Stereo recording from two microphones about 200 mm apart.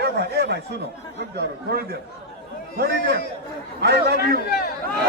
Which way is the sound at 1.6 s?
55° right (ahead or behind).